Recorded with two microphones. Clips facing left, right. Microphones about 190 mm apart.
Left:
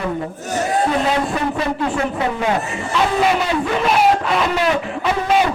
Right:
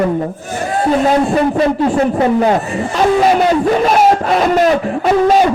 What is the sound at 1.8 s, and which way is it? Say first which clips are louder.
A man's voice: right 7 dB; 40° right (ahead or behind).